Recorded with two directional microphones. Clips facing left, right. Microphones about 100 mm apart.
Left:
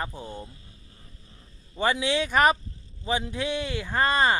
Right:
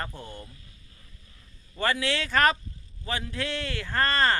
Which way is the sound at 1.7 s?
15° left (ahead or behind).